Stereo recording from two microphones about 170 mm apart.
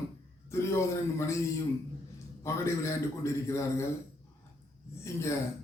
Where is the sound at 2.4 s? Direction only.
15° left (ahead or behind).